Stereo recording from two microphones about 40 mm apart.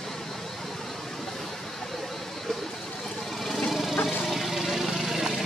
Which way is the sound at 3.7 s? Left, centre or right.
Centre.